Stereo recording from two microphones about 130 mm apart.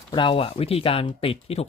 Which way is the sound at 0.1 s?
40° left (ahead or behind).